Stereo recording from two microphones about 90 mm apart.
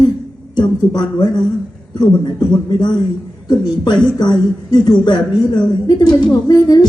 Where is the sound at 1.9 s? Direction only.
55° left (ahead or behind).